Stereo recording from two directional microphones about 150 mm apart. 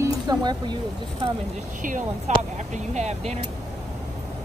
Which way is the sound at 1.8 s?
55° right (ahead or behind).